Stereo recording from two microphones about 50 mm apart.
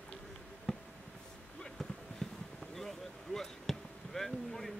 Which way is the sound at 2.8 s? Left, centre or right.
Centre.